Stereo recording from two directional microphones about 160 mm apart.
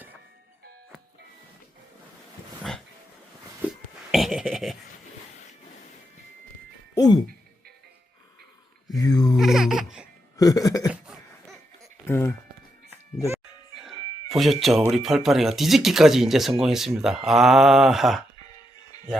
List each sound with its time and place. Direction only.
4.1 s speech: centre (ahead or behind)
6.9 s music: 25° left (ahead or behind)
9.0 s a sound: 25° left (ahead or behind)
9.4 s baby laughter: centre (ahead or behind)
10.3 s a sound: 20° left (ahead or behind)
11.0 s cough: 5° right (ahead or behind)
12.0 s music: 15° left (ahead or behind)
13.7 s speech: centre (ahead or behind)